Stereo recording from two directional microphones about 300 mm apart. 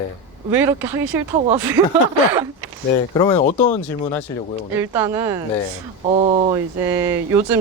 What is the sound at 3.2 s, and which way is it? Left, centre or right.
Speech, centre.